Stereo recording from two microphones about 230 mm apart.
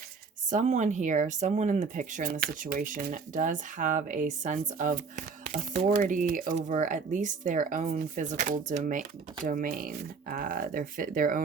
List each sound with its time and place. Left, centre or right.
0.5 s speech: right